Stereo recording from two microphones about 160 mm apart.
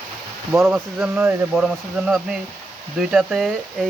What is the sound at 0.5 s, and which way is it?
Speech, 15° right (ahead or behind).